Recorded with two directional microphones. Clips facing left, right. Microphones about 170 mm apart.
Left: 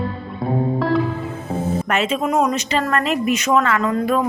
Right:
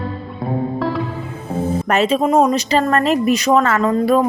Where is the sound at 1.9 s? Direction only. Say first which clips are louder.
Right 6 dB; 35° right (ahead or behind).